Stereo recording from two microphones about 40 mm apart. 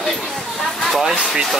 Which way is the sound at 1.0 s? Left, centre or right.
Centre.